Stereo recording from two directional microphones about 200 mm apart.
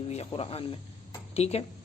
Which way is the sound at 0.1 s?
30° left (ahead or behind).